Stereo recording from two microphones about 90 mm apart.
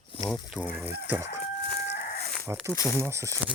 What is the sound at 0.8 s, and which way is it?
Speech, 25° right (ahead or behind).